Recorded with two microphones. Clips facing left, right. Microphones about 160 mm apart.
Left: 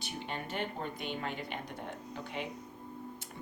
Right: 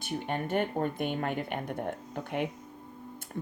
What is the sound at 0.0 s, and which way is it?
Speech, 50° right (ahead or behind).